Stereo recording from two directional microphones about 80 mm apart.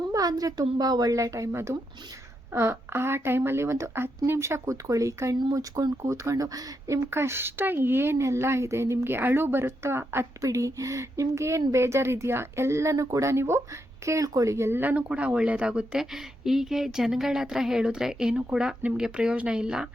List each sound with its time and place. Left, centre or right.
0.1 s a woman's voice: right
10.4 s speech: right
14.8 s a woman's voice: right